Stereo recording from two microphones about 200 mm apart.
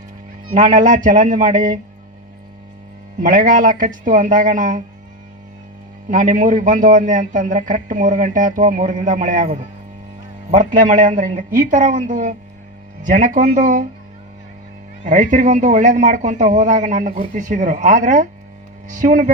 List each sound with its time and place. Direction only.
0.5 s a man's voice: 40° right (ahead or behind)
3.2 s a man's voice: 40° right (ahead or behind)
6.1 s a man's voice: 40° right (ahead or behind)
15.0 s a man's voice: 40° right (ahead or behind)